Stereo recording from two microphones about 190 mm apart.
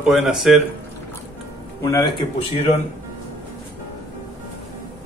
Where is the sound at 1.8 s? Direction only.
20° left (ahead or behind).